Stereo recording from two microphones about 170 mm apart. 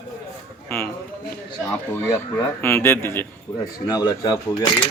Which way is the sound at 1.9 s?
10° left (ahead or behind).